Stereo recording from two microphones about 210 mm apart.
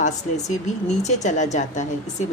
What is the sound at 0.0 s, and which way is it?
Speech, 35° left (ahead or behind).